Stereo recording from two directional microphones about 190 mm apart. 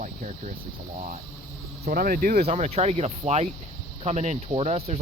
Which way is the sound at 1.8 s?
50° right (ahead or behind).